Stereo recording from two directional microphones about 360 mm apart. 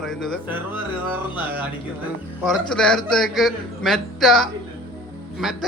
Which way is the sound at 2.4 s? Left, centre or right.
Centre.